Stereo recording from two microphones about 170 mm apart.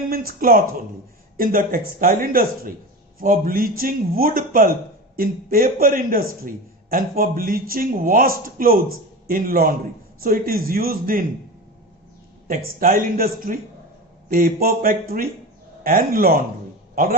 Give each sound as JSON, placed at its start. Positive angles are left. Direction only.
{"t": 0.1, "sound": "speech", "side_deg": -60}
{"t": 12.5, "sound": "a man's voice", "side_deg": -55}